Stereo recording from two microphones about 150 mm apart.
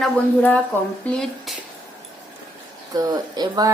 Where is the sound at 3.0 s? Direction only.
25° right (ahead or behind).